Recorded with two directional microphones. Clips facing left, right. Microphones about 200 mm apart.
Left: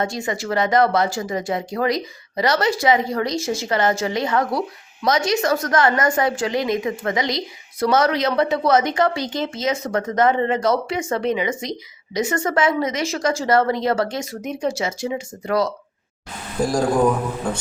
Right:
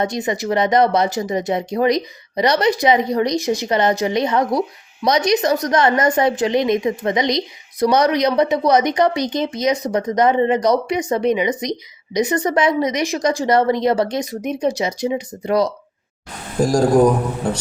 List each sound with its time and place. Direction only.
0.0 s a woman's voice: 20° right (ahead or behind)
16.7 s speech: 40° right (ahead or behind)